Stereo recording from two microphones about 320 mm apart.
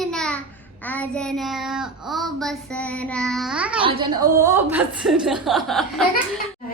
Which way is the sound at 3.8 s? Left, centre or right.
Centre.